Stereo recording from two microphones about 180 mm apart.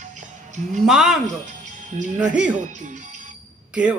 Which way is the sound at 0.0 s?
40° right (ahead or behind).